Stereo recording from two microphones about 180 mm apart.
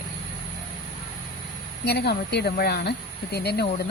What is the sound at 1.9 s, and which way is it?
Speech, 65° left (ahead or behind).